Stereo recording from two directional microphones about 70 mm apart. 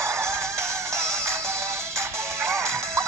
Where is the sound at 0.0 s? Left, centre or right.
Right.